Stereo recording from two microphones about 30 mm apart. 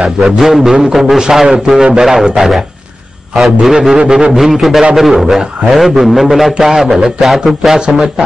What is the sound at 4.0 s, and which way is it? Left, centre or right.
Speech, right.